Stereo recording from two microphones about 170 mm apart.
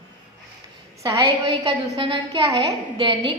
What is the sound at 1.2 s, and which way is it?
A woman's voice, 30° right (ahead or behind).